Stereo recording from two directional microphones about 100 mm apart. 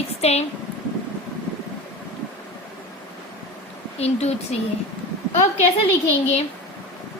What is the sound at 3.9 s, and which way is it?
Speech, 90° left.